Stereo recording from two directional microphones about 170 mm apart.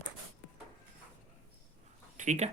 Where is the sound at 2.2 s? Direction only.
45° right (ahead or behind).